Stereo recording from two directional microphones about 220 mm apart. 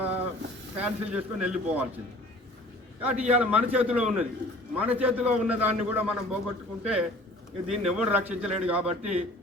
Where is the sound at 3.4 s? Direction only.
5° right (ahead or behind).